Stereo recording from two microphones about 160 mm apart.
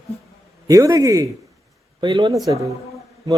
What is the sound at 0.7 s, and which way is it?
A man's voice, 20° right (ahead or behind).